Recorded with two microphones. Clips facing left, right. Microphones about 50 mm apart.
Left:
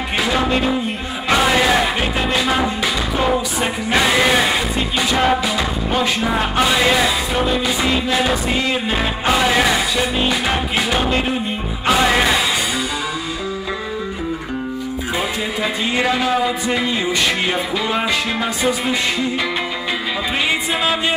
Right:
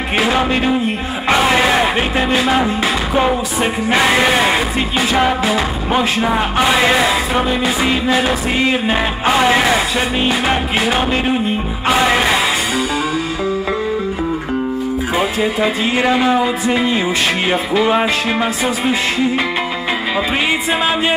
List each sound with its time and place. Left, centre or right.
1.6 s music: right
4.1 s speech: right
5.4 s music: right
6.7 s speech: right
9.9 s music: right
15.1 s speech: centre